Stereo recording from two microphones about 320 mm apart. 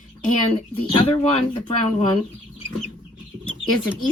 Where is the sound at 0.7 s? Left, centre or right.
Centre.